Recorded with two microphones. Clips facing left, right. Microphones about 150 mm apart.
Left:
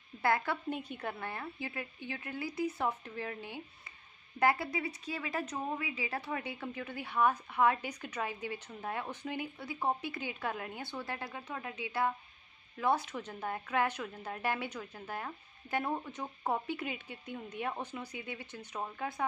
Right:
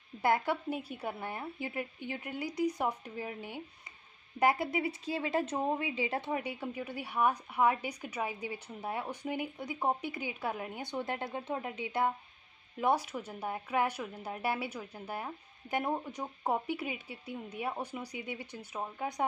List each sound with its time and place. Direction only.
0.2 s speech: 15° right (ahead or behind)
0.7 s speech: 5° right (ahead or behind)